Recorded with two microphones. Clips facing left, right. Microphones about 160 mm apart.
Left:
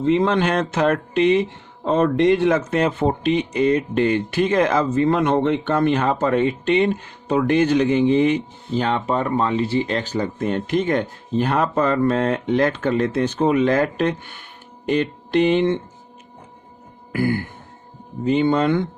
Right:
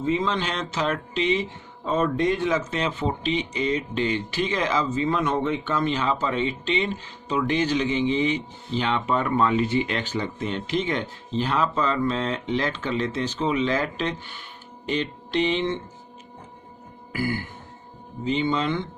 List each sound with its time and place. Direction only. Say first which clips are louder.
0.0 s speech: left 7 dB; 65° left (ahead or behind)
14.8 s a sound: left 7 dB; 55° left (ahead or behind)
17.1 s music: left 6 dB; 55° left (ahead or behind)
18.3 s speech: left 7 dB; 55° left (ahead or behind)